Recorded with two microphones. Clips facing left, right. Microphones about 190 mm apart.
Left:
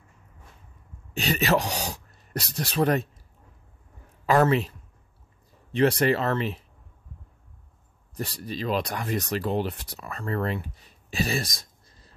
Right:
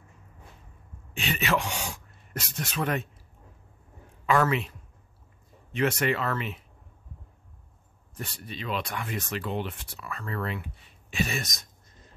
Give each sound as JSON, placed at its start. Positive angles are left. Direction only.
{"t": 1.1, "sound": "speech", "side_deg": 40}
{"t": 4.3, "sound": "speech", "side_deg": 35}
{"t": 8.2, "sound": "speech", "side_deg": 35}